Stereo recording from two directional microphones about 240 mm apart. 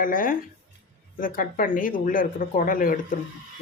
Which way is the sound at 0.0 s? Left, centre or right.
Left.